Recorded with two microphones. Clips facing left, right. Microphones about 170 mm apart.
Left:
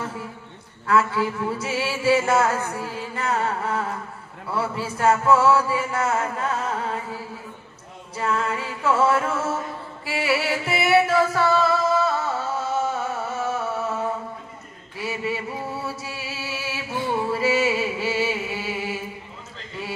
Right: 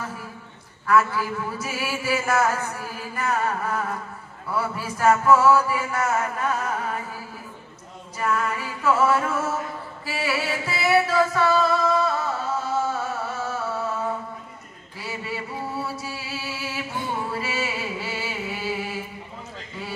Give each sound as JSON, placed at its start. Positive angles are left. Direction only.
{"t": 0.8, "sound": "a man's voice", "side_deg": 25}
{"t": 11.9, "sound": "music", "side_deg": 25}
{"t": 15.0, "sound": "music", "side_deg": 25}